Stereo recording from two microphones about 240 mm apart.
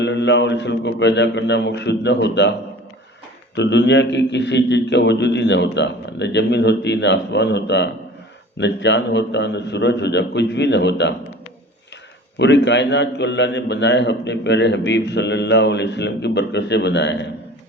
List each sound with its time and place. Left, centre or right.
0.0 s a man's voice: left
3.5 s a man's voice: left
12.4 s a man's voice: left